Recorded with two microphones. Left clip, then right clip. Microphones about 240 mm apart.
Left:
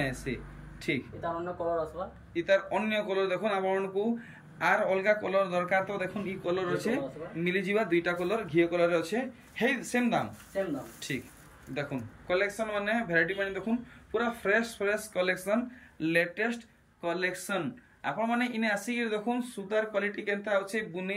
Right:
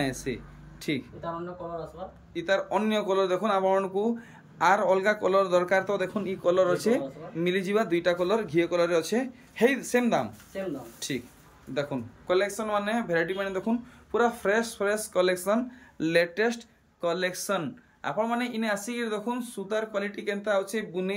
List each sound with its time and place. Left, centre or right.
0.0 s speech: centre
2.3 s speech: centre
11.7 s speech: centre